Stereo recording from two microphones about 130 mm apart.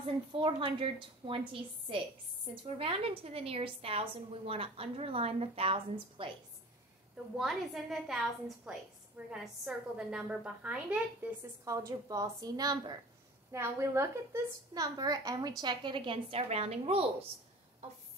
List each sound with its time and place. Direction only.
0.4 s a woman's voice: 45° right (ahead or behind)
7.3 s a woman's voice: centre (ahead or behind)
11.6 s a woman's voice: 25° right (ahead or behind); by 17.0 s 50° right (ahead or behind)